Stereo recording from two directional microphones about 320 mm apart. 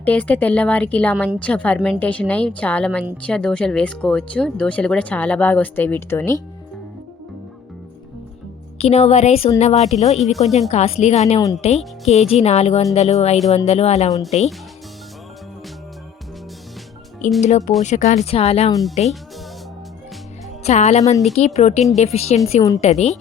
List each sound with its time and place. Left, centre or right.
0.0 s speech: centre
8.8 s a woman's voice: centre
17.8 s a woman's voice: left
20.7 s a woman's voice: left